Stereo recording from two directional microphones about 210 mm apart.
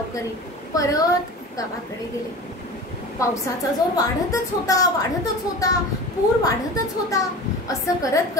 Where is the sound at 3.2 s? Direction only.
15° left (ahead or behind).